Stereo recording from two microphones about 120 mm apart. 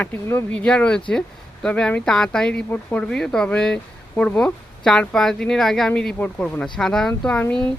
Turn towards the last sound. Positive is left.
turn(degrees=10)  # may be behind; listen again after turning